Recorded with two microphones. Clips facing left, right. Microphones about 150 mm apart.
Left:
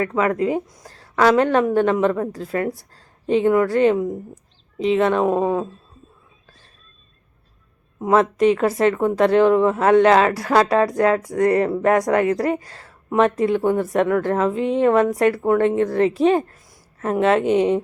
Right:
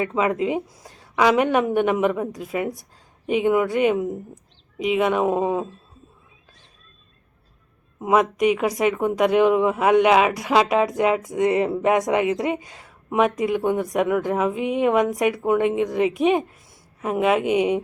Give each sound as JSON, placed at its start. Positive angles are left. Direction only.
{"t": 0.0, "sound": "speech", "side_deg": -20}
{"t": 8.0, "sound": "speech", "side_deg": -15}